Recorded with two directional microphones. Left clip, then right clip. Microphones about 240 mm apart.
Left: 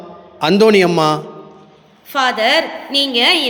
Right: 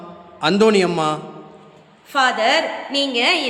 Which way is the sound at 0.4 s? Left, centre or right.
Left.